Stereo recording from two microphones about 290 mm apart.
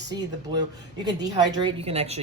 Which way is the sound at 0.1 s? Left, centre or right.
Centre.